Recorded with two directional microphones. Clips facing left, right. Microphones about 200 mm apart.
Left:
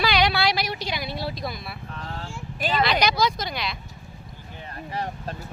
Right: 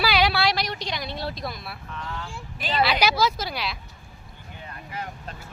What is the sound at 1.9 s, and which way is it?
Vehicle, 35° left (ahead or behind).